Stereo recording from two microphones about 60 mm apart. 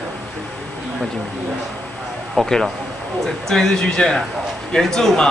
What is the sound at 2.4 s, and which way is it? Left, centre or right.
A man's voice, centre.